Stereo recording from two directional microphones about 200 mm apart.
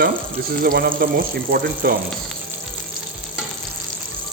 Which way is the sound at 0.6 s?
50° right (ahead or behind).